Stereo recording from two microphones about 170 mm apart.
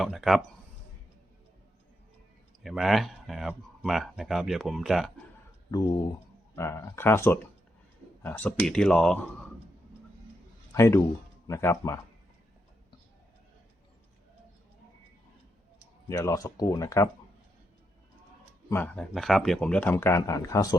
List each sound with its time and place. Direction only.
0.0 s speech: centre (ahead or behind)
2.6 s speech: centre (ahead or behind)
6.6 s speech: 15° left (ahead or behind)
10.7 s a man's voice: 15° left (ahead or behind)
16.0 s speech: 15° left (ahead or behind)
18.7 s speech: 10° left (ahead or behind)
19.1 s speech: centre (ahead or behind); by 20.7 s 20° left (ahead or behind)